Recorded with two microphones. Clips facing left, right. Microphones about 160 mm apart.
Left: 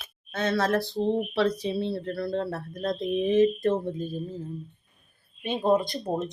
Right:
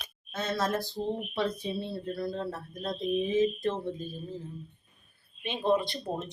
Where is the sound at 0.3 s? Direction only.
70° left (ahead or behind); by 4.1 s 55° left (ahead or behind).